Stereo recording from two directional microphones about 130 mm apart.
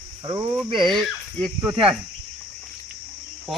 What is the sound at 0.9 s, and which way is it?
Speech, centre (ahead or behind).